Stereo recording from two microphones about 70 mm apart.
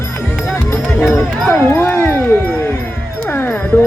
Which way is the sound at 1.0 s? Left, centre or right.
Left.